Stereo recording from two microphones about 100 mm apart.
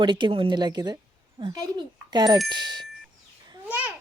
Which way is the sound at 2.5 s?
45° right (ahead or behind).